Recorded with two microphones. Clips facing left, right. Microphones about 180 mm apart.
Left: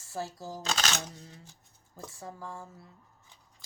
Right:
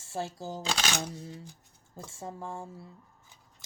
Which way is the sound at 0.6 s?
10° right (ahead or behind).